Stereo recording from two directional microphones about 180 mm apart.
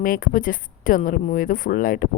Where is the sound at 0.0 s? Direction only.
50° left (ahead or behind).